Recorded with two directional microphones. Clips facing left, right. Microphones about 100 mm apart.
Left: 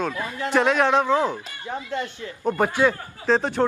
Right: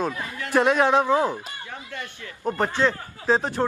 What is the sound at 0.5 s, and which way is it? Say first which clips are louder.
Speech: even; 15° right (ahead or behind).